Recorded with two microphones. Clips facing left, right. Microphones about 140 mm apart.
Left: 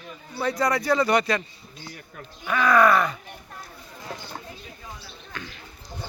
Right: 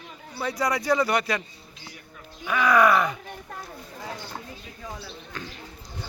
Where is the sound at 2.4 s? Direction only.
10° right (ahead or behind).